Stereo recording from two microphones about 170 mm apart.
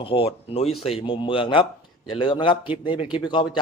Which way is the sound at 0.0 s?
30° left (ahead or behind).